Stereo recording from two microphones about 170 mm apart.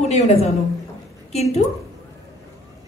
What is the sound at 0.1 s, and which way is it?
A woman's voice, 40° left (ahead or behind).